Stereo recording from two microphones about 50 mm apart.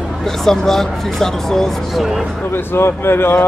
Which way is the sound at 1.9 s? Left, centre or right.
Centre.